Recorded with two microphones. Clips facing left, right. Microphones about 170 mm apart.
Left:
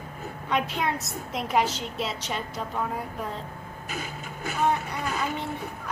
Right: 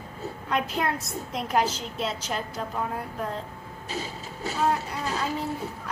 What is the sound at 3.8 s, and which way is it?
Printer, 30° right (ahead or behind).